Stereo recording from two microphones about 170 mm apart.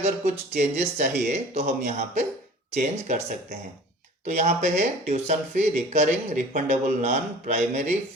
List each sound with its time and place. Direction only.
0.0 s speech: 40° right (ahead or behind)
4.3 s speech: 40° right (ahead or behind)